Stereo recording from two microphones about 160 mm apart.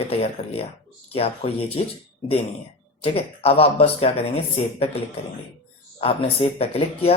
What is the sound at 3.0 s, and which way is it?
Speech, 40° left (ahead or behind).